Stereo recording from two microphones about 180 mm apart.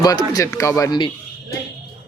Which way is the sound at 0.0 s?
20° left (ahead or behind).